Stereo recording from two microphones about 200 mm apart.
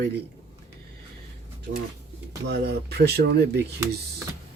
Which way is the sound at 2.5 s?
55° right (ahead or behind).